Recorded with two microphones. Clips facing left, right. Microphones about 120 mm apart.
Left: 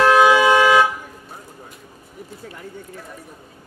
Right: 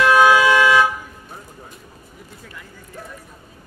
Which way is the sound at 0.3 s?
20° left (ahead or behind).